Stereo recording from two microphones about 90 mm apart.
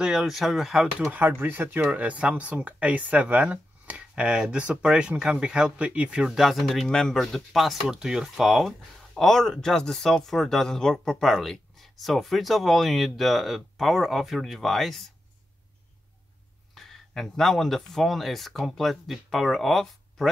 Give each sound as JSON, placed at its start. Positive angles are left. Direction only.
{"t": 0.0, "sound": "speech", "side_deg": -5}
{"t": 1.1, "sound": "speech", "side_deg": -20}
{"t": 16.7, "sound": "speech", "side_deg": 0}